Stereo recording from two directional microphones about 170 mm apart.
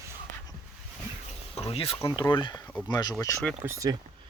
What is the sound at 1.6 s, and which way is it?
Speech, 35° left (ahead or behind).